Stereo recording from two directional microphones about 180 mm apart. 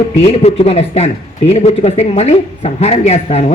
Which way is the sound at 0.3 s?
35° left (ahead or behind).